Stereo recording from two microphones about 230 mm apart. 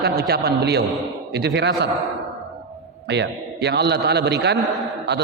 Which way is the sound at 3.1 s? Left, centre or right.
Right.